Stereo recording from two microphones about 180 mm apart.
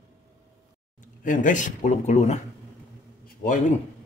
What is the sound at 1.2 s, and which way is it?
A man's voice, 45° left (ahead or behind).